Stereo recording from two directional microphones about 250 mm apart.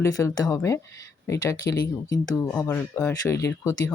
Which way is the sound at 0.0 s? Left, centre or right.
Centre.